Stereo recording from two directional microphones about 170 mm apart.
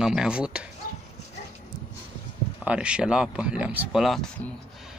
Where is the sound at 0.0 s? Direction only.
5° right (ahead or behind).